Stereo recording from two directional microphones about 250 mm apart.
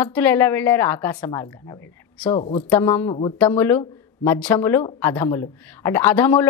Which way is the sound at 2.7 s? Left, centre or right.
Centre.